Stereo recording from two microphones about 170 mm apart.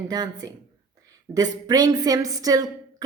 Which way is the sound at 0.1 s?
25° right (ahead or behind).